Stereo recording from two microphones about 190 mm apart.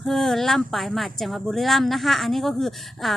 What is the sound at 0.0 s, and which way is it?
Speech, centre (ahead or behind).